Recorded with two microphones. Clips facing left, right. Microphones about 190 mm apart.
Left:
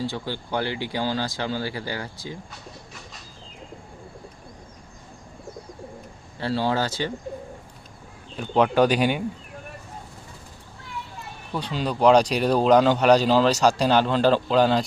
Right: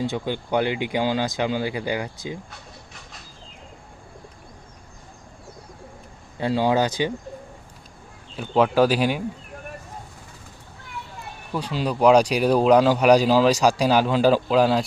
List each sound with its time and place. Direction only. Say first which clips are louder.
0.0 s a man's voice: right 3 dB; 20° right (ahead or behind)
6.4 s a man's voice: right 4 dB; 15° right (ahead or behind)
8.4 s speech: right 1 dB; centre (ahead or behind)
11.5 s a man's voice: right 2 dB; 5° right (ahead or behind)